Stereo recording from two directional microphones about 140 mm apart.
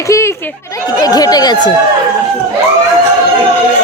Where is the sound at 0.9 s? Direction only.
25° left (ahead or behind).